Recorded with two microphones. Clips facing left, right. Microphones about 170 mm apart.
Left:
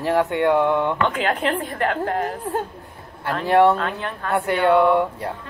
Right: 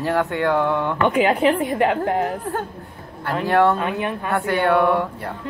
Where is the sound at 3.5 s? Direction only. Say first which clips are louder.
Left 2 dB; 20° left (ahead or behind).